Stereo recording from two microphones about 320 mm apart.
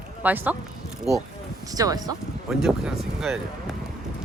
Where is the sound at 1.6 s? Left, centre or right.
Centre.